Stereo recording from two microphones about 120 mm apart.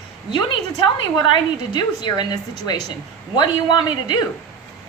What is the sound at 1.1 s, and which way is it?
A woman's voice, 40° left (ahead or behind).